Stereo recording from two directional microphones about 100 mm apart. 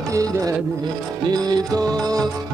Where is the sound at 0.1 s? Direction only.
35° right (ahead or behind).